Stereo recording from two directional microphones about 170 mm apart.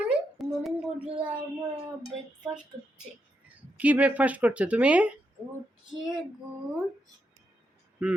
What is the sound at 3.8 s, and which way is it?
A woman's voice, 10° right (ahead or behind).